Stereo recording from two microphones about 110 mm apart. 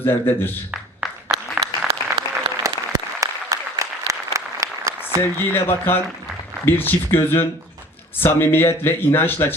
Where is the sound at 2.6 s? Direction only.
30° right (ahead or behind).